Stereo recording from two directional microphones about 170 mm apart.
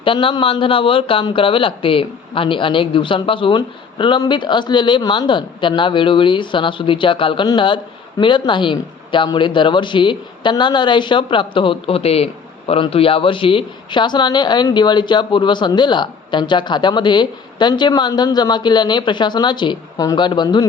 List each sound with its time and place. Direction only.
0.0 s speech: 30° left (ahead or behind)